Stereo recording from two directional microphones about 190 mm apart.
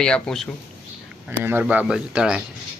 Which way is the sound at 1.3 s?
10° right (ahead or behind).